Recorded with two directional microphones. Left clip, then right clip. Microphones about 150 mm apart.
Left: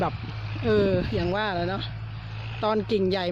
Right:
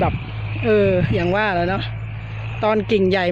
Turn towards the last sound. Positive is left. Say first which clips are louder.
# right 8 dB
turn(degrees=0)  # may be behind; listen again after turning